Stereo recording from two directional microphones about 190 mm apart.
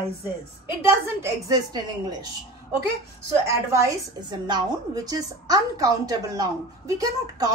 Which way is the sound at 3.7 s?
20° right (ahead or behind).